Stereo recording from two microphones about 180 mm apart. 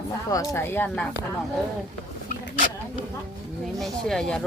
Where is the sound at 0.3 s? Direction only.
20° left (ahead or behind).